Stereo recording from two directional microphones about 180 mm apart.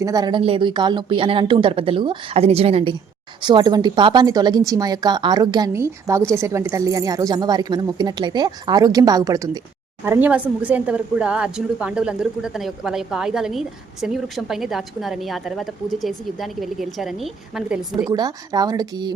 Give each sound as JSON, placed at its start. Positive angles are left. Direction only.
{"t": 0.0, "sound": "a woman's voice", "side_deg": -20}
{"t": 18.1, "sound": "a woman's voice", "side_deg": -20}